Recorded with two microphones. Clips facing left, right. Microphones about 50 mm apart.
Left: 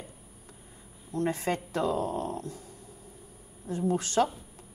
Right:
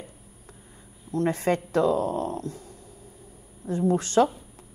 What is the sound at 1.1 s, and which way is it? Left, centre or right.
A woman's voice, right.